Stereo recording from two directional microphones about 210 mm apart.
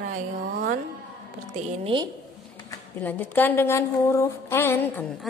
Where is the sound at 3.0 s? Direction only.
10° left (ahead or behind).